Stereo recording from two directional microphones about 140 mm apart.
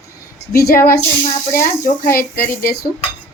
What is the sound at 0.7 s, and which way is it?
Speech, 90° left.